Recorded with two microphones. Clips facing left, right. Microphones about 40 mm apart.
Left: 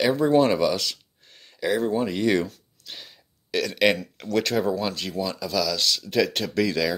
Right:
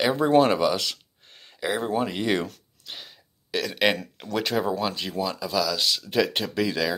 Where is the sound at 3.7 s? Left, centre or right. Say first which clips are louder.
Left 2 dB; centre.